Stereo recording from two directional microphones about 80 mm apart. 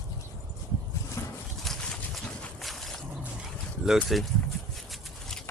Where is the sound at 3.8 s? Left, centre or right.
Centre.